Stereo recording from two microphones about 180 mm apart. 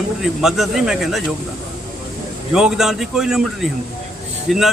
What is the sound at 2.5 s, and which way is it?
Speech, 5° right (ahead or behind).